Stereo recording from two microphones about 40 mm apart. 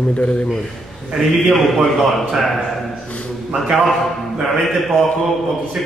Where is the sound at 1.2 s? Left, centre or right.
Centre.